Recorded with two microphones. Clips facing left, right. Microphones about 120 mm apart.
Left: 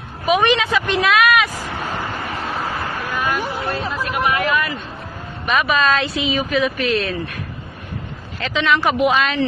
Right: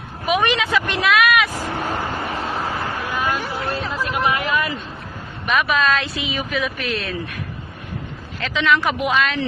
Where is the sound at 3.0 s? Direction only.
20° right (ahead or behind).